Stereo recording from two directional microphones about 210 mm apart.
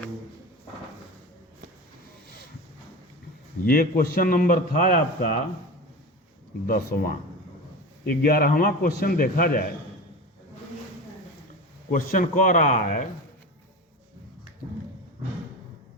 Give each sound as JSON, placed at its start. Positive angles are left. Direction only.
{"t": 3.7, "sound": "a man's voice", "side_deg": 45}
{"t": 6.7, "sound": "a man's voice", "side_deg": 45}
{"t": 11.9, "sound": "speech", "side_deg": 40}